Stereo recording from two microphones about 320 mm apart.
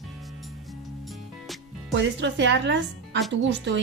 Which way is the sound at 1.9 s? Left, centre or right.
Right.